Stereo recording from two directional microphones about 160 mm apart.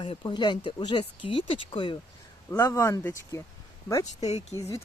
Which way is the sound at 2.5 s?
15° left (ahead or behind).